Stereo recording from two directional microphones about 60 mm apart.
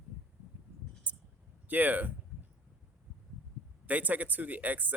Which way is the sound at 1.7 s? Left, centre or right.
Right.